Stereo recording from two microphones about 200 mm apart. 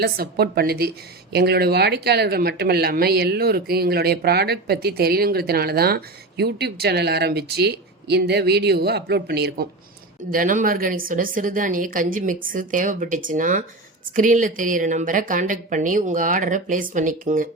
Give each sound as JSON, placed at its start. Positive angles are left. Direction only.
{"t": 0.0, "sound": "speech", "side_deg": -50}
{"t": 10.3, "sound": "speech", "side_deg": -40}